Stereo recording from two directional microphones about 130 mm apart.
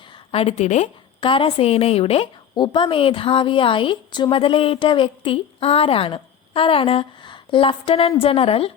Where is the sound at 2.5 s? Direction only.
40° left (ahead or behind).